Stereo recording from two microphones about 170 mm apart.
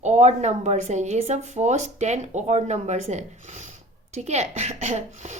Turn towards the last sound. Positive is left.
turn(degrees=-45)  # may be behind; listen again after turning